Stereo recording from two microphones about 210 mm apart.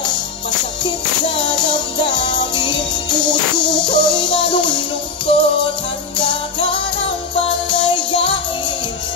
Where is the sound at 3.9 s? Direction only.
20° left (ahead or behind).